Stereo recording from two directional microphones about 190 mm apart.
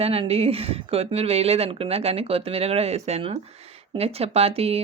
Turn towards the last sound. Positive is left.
turn(degrees=-30)  # may be behind; listen again after turning